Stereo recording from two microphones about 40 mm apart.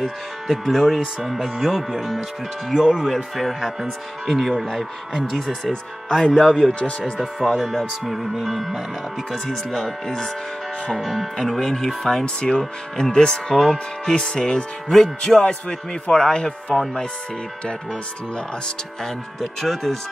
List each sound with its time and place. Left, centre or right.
0.0 s speech: centre
4.6 s speech: centre
6.7 s speech: left
7.2 s speech: centre
9.3 s speech: centre
11.0 s speech: centre
19.0 s speech: centre